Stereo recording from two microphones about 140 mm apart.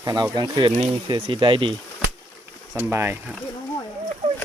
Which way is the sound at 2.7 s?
15° right (ahead or behind).